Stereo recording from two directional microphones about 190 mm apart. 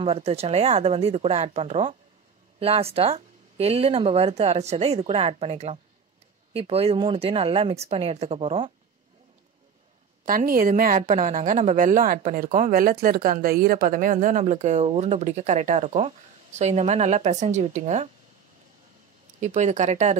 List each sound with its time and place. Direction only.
0.0 s speech: 30° right (ahead or behind)
10.2 s a woman's voice: 50° right (ahead or behind)
19.4 s speech: 40° right (ahead or behind)